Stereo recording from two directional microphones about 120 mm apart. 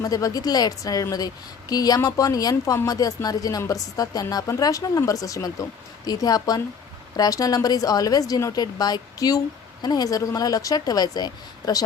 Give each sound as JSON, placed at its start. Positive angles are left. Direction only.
{"t": 0.0, "sound": "a woman's voice", "side_deg": 30}